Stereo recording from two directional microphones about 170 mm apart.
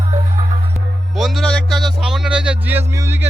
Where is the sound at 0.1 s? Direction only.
40° right (ahead or behind).